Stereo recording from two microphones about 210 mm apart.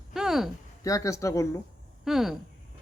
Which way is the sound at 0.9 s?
15° left (ahead or behind).